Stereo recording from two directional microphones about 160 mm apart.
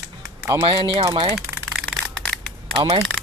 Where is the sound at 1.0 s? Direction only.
25° right (ahead or behind).